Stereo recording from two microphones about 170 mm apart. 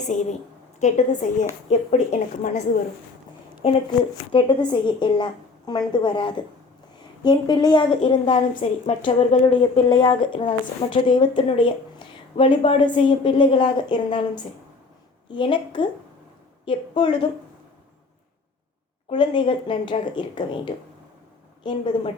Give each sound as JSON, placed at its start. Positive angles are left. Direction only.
{"t": 0.1, "sound": "a woman's voice", "side_deg": 45}
{"t": 3.6, "sound": "a woman's voice", "side_deg": 35}
{"t": 8.6, "sound": "a woman's voice", "side_deg": 40}
{"t": 19.1, "sound": "speech", "side_deg": 30}